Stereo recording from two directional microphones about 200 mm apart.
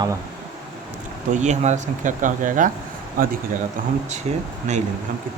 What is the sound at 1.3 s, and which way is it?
Speech, 35° right (ahead or behind).